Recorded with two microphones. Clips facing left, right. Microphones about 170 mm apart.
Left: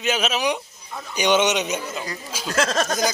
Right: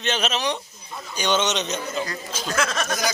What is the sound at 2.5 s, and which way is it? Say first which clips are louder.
Speech: left 4 dB; 40° left (ahead or behind).